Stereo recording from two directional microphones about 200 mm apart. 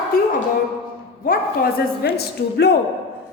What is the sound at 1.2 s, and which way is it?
A woman's voice, 50° left (ahead or behind).